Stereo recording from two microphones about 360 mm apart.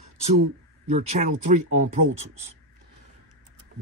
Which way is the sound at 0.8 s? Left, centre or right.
Centre.